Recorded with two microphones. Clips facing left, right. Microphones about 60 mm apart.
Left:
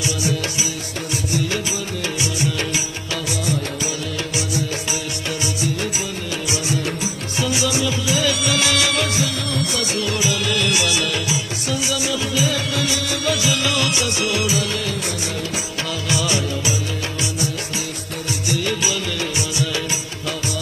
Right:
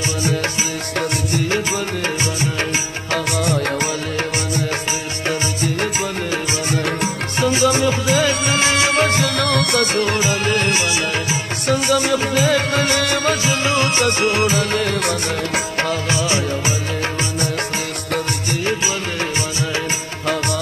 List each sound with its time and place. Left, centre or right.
3.4 s music: right
6.7 s music: right
11.6 s music: right
16.1 s music of bollywood: right